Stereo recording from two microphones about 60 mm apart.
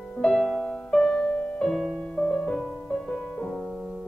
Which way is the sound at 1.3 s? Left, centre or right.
Left.